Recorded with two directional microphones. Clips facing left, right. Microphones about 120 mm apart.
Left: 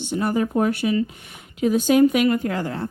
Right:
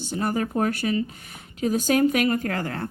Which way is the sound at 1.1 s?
40° right (ahead or behind).